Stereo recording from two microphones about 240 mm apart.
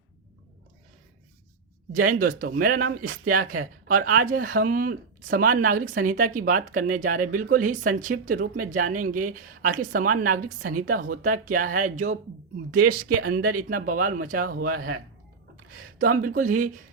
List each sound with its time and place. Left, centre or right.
1.9 s speech: right
15.5 s a sound: right
16.2 s speech: right